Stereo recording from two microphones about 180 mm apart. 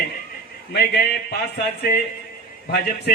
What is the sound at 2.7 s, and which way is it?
Speech, 65° left (ahead or behind).